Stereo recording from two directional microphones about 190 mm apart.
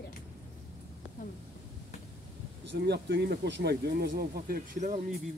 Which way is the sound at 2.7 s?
60° right (ahead or behind).